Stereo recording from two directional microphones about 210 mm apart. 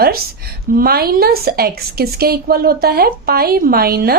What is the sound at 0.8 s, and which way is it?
A woman's voice, 45° right (ahead or behind).